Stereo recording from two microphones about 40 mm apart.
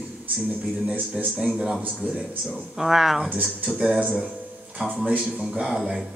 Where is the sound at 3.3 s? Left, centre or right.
Right.